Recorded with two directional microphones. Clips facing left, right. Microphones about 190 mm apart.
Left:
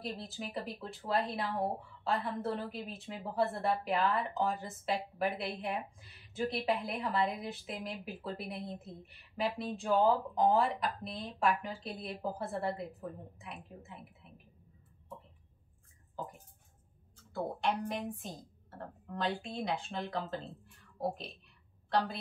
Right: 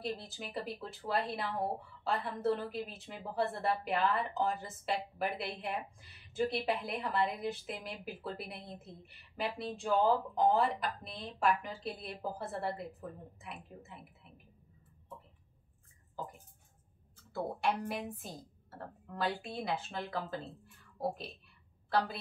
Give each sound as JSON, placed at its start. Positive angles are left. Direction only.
{"t": 0.0, "sound": "a woman's voice", "side_deg": 0}
{"t": 17.3, "sound": "a woman's voice", "side_deg": -5}